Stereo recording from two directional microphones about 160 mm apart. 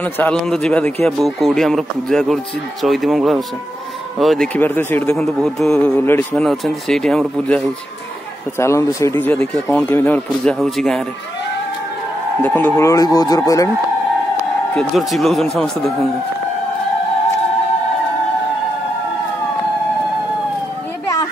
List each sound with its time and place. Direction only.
0.0 s a man's voice: 5° left (ahead or behind)
4.6 s speech: 10° left (ahead or behind)
8.5 s speech: 15° left (ahead or behind); by 11.1 s centre (ahead or behind)
12.4 s speech: 10° left (ahead or behind)
14.8 s a man's voice: centre (ahead or behind)